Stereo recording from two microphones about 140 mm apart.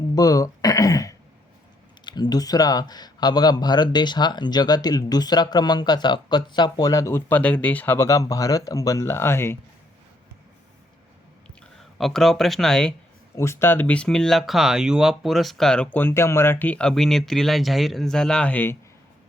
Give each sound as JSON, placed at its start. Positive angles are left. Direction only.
{"t": 0.1, "sound": "a sound", "side_deg": 25}
{"t": 2.0, "sound": "speech", "side_deg": 30}
{"t": 11.9, "sound": "speech", "side_deg": 0}
{"t": 13.3, "sound": "speech", "side_deg": 20}